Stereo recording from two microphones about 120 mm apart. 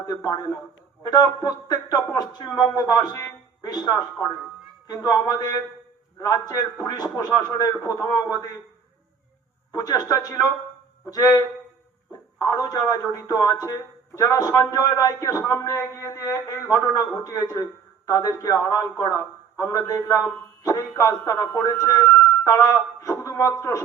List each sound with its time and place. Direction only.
0.0 s speech: 30° left (ahead or behind)
9.7 s a man's voice: 30° left (ahead or behind)